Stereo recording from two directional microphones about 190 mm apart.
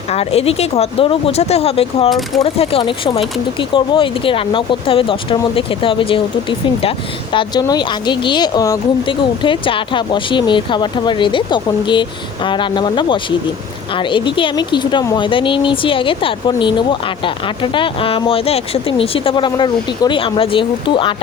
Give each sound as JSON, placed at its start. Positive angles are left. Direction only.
{"t": 0.1, "sound": "speech", "side_deg": 30}
{"t": 2.0, "sound": "speech", "side_deg": 0}
{"t": 2.4, "sound": "speech", "side_deg": 30}